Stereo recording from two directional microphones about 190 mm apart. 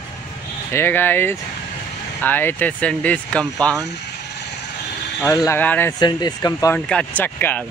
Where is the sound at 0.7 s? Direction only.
10° left (ahead or behind).